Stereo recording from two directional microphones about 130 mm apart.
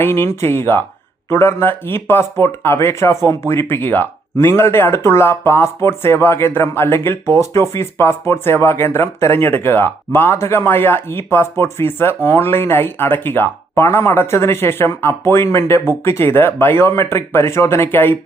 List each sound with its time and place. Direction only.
0.0 s speech: 20° left (ahead or behind)